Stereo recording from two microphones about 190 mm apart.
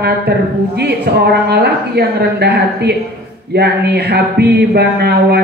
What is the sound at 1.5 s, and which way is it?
Speech, 60° right (ahead or behind).